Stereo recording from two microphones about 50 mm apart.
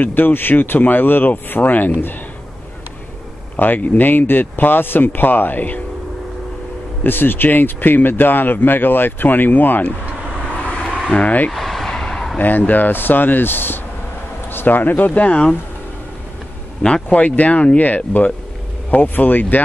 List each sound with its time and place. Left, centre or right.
0.0 s speech: left
3.5 s speech: left
7.0 s speech: left
10.5 s vehicle: left
11.1 s speech: left
11.5 s vehicle: centre
12.4 s speech: left
16.8 s speech: left